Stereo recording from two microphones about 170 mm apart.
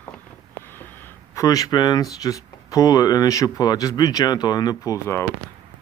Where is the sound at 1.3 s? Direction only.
20° left (ahead or behind).